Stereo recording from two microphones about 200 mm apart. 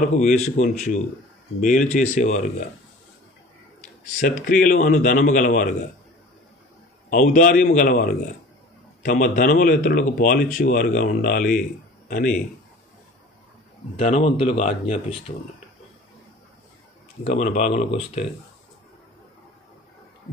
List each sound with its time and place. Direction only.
0.1 s a man's voice: 35° left (ahead or behind)
4.2 s a man's voice: 40° left (ahead or behind)
7.1 s speech: 45° left (ahead or behind)
13.9 s a man's voice: 35° left (ahead or behind)
17.2 s a man's voice: 35° left (ahead or behind)